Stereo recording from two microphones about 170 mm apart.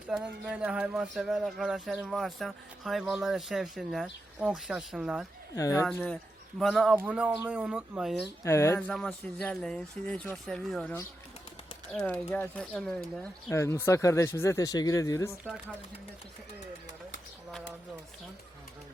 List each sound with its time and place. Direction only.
0.1 s speech: 5° right (ahead or behind)
5.5 s speech: 15° left (ahead or behind)
6.6 s speech: centre (ahead or behind)
8.4 s speech: 15° left (ahead or behind)
8.9 s speech: 5° left (ahead or behind)
13.5 s speech: 15° left (ahead or behind)